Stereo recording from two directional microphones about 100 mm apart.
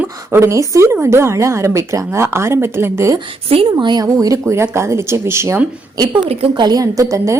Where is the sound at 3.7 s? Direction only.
45° right (ahead or behind).